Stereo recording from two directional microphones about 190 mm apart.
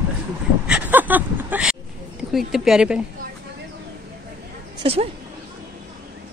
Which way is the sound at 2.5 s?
5° right (ahead or behind).